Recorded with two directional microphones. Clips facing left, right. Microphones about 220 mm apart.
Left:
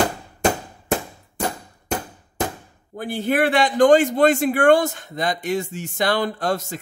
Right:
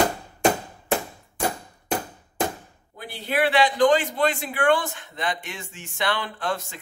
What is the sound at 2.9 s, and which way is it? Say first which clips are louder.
A man's voice: left 6 dB; 50° left (ahead or behind).